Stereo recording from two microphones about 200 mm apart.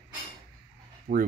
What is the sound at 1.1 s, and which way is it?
Speech, 40° right (ahead or behind).